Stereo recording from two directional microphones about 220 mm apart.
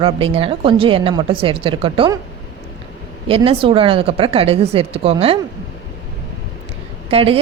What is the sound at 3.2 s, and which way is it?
A woman's voice, 25° right (ahead or behind).